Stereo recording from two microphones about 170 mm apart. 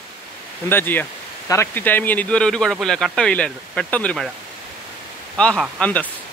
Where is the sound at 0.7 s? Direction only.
10° left (ahead or behind).